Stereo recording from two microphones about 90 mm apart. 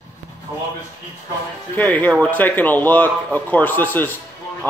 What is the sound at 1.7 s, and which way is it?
A man's voice, 20° left (ahead or behind).